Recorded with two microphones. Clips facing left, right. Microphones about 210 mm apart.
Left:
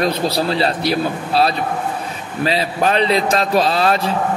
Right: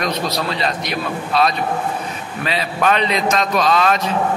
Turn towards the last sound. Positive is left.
turn(degrees=35)  # may be behind; listen again after turning